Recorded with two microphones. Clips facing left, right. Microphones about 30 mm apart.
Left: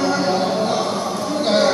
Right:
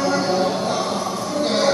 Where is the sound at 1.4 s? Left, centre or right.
Centre.